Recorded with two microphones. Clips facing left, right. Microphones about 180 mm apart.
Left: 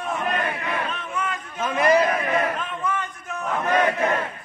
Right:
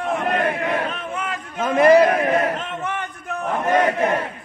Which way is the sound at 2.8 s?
65° right (ahead or behind).